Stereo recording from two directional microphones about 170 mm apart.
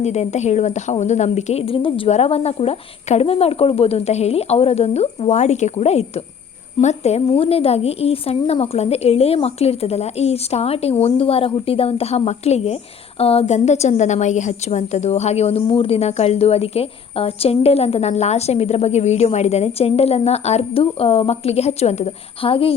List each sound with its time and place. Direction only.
0.0 s a woman's voice: 40° left (ahead or behind)